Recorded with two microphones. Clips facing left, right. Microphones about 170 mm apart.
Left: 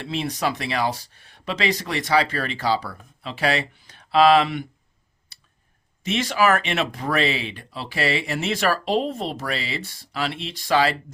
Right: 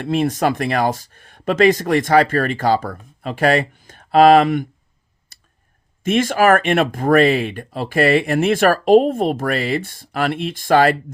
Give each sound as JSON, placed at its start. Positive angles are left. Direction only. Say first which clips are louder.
{"t": 0.0, "sound": "speech", "louder": "right 8 dB", "side_deg": -50}
{"t": 5.3, "sound": "a sound", "louder": "right 2 dB", "side_deg": -45}
{"t": 6.0, "sound": "speech", "louder": "right 6 dB", "side_deg": -50}